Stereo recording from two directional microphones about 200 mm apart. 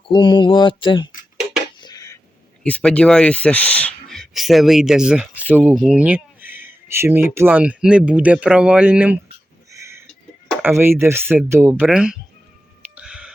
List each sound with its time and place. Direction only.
0.1 s speech: 25° left (ahead or behind)
1.8 s a sound: 20° left (ahead or behind)
2.6 s speech: 5° left (ahead or behind)
9.7 s a sound: 15° right (ahead or behind)
10.6 s speech: 10° right (ahead or behind)
13.0 s music: 5° right (ahead or behind)